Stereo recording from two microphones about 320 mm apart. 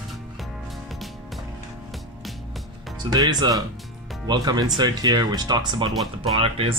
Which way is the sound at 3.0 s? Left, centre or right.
Centre.